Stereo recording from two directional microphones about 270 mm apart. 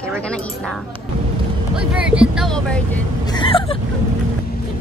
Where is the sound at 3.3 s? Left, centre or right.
Centre.